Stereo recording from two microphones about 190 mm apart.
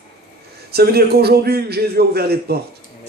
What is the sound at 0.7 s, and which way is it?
A man's voice, 55° right (ahead or behind).